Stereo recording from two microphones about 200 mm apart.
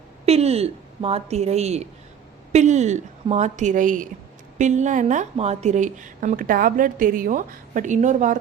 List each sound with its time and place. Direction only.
0.3 s speech: 30° right (ahead or behind)